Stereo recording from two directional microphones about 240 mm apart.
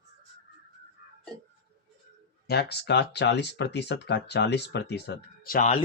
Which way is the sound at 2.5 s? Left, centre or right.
Left.